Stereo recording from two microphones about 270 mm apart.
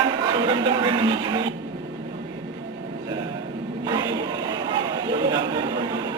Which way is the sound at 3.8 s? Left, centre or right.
Centre.